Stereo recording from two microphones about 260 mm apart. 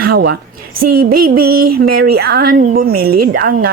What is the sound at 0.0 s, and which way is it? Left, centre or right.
A woman's voice, right.